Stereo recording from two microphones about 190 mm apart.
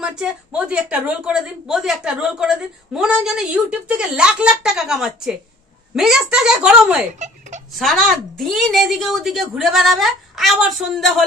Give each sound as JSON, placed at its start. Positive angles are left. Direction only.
{"t": 0.0, "sound": "a woman's voice", "side_deg": -5}
{"t": 7.2, "sound": "speech", "side_deg": -40}
{"t": 7.7, "sound": "a woman's voice", "side_deg": 0}